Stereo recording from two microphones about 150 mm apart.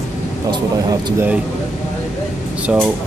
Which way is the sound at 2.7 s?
5° right (ahead or behind).